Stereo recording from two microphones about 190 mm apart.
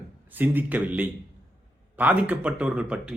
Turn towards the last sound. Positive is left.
turn(degrees=-5)  # may be behind; listen again after turning